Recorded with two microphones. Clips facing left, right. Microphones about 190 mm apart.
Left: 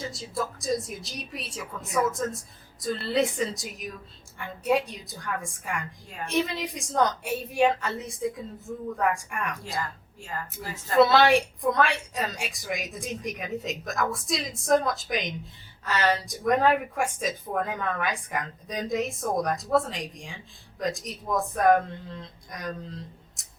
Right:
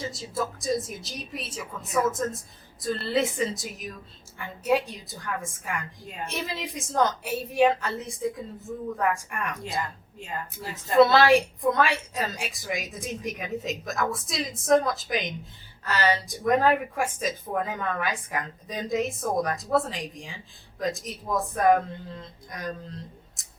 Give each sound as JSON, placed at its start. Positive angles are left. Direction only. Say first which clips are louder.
{"t": 0.0, "sound": "a woman's voice", "louder": "right 1 dB", "side_deg": 0}
{"t": 9.6, "sound": "a woman's voice", "louder": "right 1 dB", "side_deg": -20}
{"t": 10.9, "sound": "a woman's voice", "louder": "right 1 dB", "side_deg": 0}